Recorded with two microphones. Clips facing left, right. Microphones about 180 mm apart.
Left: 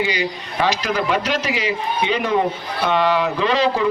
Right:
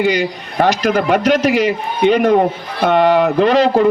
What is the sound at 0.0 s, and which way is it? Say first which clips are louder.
Speech: right 6 dB; 55° right (ahead or behind).